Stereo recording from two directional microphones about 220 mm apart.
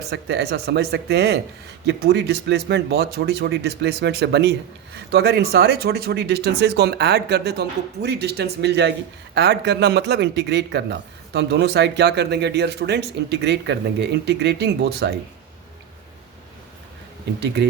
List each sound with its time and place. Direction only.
0.1 s speech: 50° right (ahead or behind)